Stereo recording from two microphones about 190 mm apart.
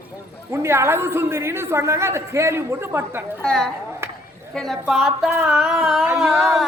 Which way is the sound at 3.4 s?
5° left (ahead or behind).